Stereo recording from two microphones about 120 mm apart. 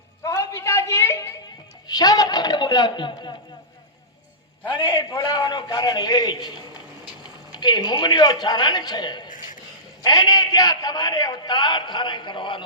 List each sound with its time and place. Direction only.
0.2 s a sound: 25° left (ahead or behind)
1.9 s a man's voice: 30° left (ahead or behind)
5.1 s a man's voice: 40° left (ahead or behind)